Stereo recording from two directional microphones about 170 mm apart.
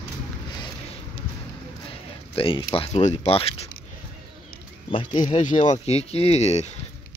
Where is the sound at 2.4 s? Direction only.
30° left (ahead or behind).